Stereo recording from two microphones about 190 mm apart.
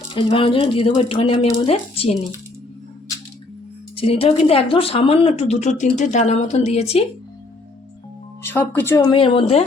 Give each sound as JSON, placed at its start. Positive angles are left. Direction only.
{"t": 0.1, "sound": "speech", "side_deg": 30}
{"t": 3.9, "sound": "a woman's voice", "side_deg": 30}
{"t": 8.4, "sound": "speech", "side_deg": 10}
{"t": 9.0, "sound": "speech", "side_deg": 25}